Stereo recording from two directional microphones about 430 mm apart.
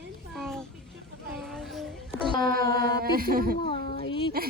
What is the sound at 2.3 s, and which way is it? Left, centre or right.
Mantra, centre.